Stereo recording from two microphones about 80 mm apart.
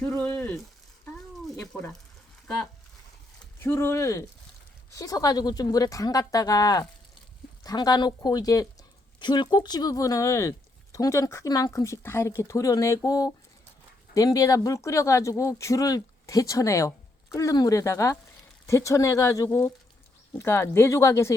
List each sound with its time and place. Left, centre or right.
0.1 s speech: centre
1.5 s speech: centre
3.6 s speech: left
4.9 s speech: left
9.1 s speech: left
11.4 s speech: left
11.7 s speech: left
20.4 s speech: left